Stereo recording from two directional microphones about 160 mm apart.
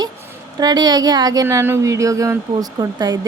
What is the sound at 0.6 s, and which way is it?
Speech, 25° right (ahead or behind).